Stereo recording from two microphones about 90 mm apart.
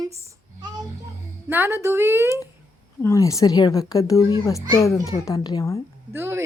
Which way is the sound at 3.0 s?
40° left (ahead or behind).